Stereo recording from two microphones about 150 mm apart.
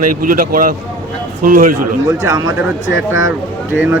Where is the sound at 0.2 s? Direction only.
65° right (ahead or behind).